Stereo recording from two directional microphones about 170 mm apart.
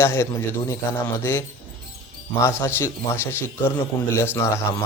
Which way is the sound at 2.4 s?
15° left (ahead or behind).